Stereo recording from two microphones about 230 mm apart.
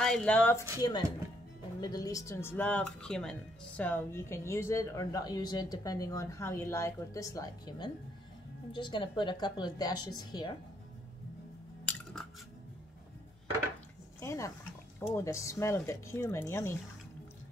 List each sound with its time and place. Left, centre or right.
0.0 s speech: centre
1.8 s a woman's voice: centre
11.8 s cutlery: centre
14.2 s speech: centre